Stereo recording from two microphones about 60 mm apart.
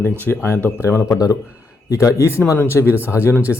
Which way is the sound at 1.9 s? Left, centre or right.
Left.